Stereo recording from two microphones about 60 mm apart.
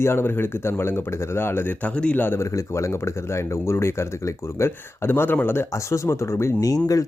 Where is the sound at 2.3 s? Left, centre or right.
Left.